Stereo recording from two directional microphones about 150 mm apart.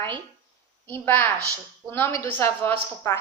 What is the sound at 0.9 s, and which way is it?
A woman's voice, 15° left (ahead or behind).